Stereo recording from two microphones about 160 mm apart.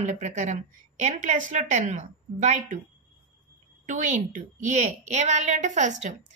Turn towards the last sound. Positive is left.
turn(degrees=-50)  # may be behind; listen again after turning